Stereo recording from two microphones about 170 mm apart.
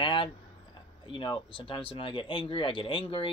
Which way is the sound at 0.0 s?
30° left (ahead or behind).